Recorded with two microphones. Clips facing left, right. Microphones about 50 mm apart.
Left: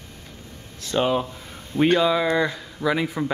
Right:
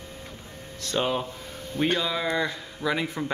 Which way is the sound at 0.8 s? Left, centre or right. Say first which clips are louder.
Left 5 dB; centre.